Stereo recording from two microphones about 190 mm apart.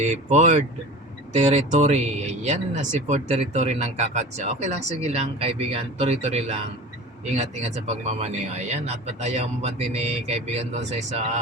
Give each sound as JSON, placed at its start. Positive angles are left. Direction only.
{"t": 0.0, "sound": "speech", "side_deg": -40}